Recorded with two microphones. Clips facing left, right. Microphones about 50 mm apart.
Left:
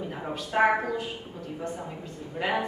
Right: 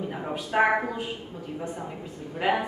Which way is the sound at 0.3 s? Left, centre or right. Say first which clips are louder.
Even; centre.